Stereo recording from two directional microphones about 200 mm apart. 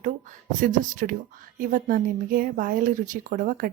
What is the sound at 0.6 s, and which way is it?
Speech, 40° right (ahead or behind).